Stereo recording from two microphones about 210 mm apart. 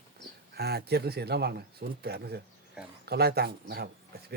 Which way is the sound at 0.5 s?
50° right (ahead or behind).